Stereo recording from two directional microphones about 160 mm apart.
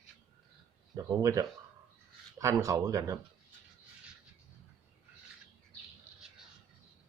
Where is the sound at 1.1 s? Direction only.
20° right (ahead or behind).